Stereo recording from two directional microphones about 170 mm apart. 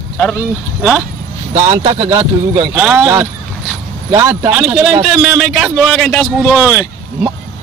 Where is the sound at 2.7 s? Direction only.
5° right (ahead or behind).